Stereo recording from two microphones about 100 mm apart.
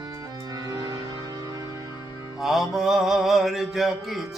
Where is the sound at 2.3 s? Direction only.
5° right (ahead or behind).